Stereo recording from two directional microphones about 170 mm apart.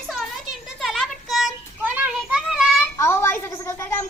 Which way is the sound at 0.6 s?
Centre (ahead or behind).